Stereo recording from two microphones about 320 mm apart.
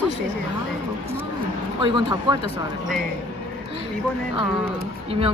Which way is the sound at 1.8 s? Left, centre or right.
Centre.